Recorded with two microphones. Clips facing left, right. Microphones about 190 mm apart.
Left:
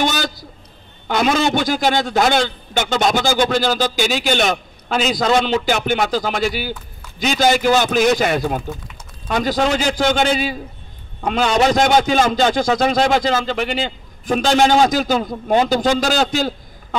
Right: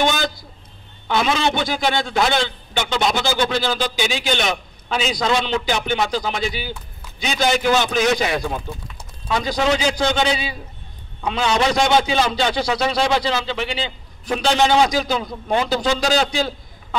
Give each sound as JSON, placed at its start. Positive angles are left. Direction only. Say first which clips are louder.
{"t": 1.0, "sound": "a man's voice", "louder": "left 3 dB", "side_deg": 45}